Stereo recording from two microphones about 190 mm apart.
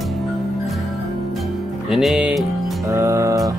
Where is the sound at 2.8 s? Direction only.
15° right (ahead or behind).